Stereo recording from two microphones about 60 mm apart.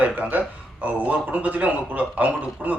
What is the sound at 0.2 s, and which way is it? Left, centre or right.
Speech, right.